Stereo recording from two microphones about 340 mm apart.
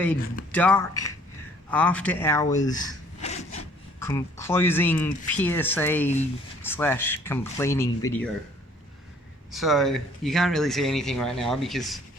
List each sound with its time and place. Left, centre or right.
0.5 s speech: centre
2.6 s a sound: centre
4.4 s speech: centre
9.5 s speech: centre